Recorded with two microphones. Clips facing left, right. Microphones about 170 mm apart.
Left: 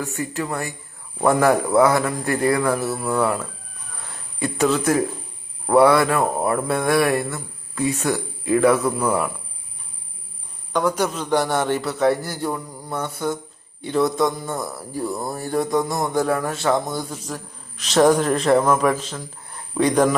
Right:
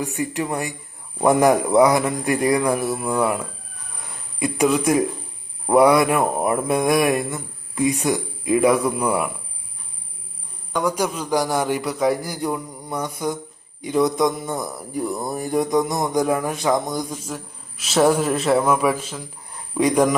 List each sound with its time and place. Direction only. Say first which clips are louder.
0.0 s speech: right 2 dB; 15° right (ahead or behind)
10.7 s a man's voice: left 1 dB; 10° right (ahead or behind)